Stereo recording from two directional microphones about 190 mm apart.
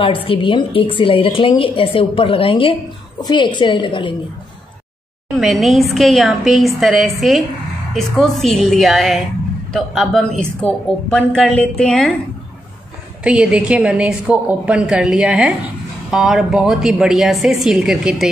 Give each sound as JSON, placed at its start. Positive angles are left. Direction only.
{"t": 0.0, "sound": "a woman's voice", "side_deg": 30}
{"t": 5.4, "sound": "a woman's voice", "side_deg": 0}
{"t": 13.2, "sound": "a woman's voice", "side_deg": -5}